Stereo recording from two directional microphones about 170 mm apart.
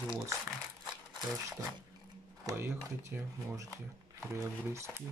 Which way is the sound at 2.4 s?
15° right (ahead or behind).